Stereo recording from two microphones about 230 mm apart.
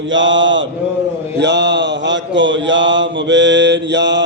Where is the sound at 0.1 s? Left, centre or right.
Right.